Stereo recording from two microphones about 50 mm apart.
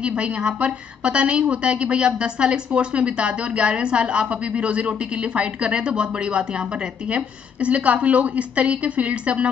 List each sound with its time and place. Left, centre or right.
0.0 s a woman's voice: right